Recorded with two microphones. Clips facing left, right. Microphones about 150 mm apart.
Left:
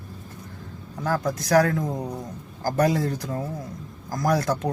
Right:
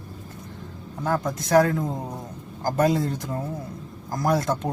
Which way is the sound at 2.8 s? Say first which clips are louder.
Right 3 dB; 25° right (ahead or behind).